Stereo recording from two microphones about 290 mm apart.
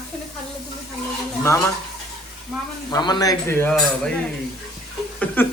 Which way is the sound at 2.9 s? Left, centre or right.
Centre.